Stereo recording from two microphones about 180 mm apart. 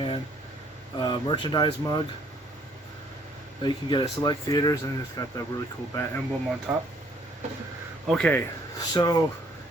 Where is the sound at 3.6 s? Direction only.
25° left (ahead or behind).